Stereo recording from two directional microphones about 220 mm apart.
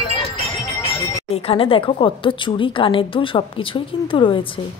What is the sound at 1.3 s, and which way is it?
A woman's voice, 25° left (ahead or behind).